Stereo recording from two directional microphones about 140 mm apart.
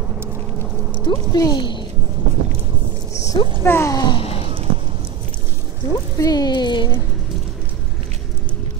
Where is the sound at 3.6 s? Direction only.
20° left (ahead or behind).